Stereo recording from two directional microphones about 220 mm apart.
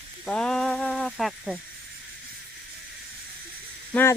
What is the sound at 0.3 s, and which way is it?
Speech, 5° left (ahead or behind).